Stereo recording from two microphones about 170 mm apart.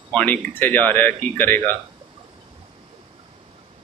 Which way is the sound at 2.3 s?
30° right (ahead or behind).